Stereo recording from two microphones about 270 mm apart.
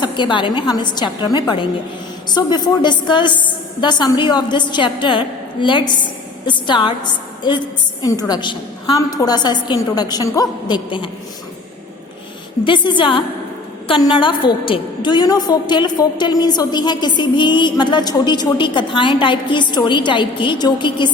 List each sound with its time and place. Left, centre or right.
0.0 s music: centre
3.4 s a sound: centre
4.2 s music: centre
12.6 s music: centre